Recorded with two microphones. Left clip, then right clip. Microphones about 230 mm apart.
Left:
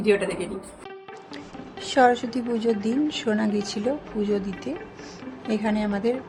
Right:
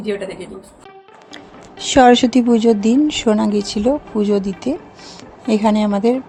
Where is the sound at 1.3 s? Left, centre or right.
Right.